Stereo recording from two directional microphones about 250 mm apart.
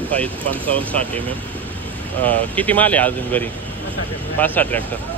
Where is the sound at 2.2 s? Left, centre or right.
Centre.